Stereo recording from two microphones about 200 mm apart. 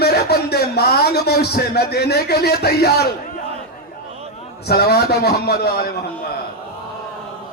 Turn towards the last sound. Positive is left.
turn(degrees=50)  # may be behind; listen again after turning